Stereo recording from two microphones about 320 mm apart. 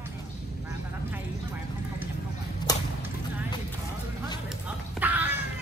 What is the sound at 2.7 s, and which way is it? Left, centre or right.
Whip, centre.